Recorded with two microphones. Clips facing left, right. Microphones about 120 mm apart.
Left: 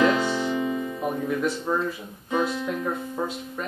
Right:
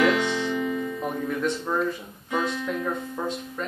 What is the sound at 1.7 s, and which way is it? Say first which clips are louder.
Speech: even; 10° left (ahead or behind).